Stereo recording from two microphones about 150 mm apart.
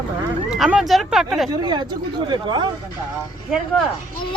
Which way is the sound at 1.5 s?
30° right (ahead or behind).